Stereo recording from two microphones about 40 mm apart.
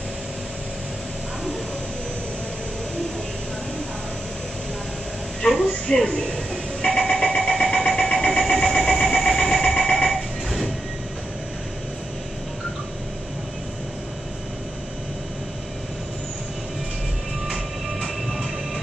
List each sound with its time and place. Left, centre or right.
5.4 s a woman's voice: left
6.2 s a sound: centre
18.0 s train: centre